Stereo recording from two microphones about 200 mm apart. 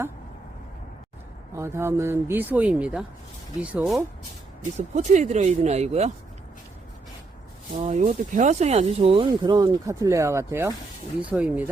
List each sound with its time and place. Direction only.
1.5 s speech: 15° right (ahead or behind)
4.9 s speech: 35° right (ahead or behind)
7.8 s speech: 35° right (ahead or behind); by 11.7 s 5° right (ahead or behind)